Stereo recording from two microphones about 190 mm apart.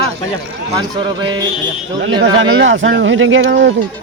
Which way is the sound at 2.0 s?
75° right (ahead or behind).